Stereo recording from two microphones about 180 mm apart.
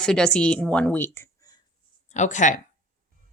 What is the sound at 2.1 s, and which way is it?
Speech, 40° left (ahead or behind).